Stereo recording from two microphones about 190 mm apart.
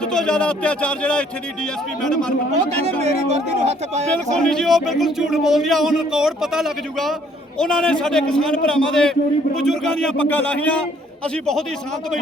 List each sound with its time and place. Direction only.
0.0 s speech: 5° left (ahead or behind)
3.0 s speech: 35° right (ahead or behind)
4.1 s a man's voice: 5° left (ahead or behind)